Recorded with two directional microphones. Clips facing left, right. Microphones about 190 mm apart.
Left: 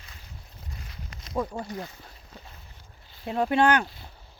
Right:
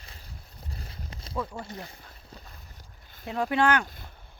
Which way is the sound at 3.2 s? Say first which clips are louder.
Left 3 dB; 25° left (ahead or behind).